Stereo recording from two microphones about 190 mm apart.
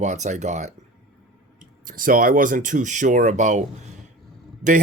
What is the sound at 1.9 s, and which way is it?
Speech, 45° right (ahead or behind).